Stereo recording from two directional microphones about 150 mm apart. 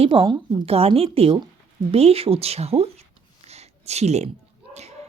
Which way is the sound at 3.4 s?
45° right (ahead or behind).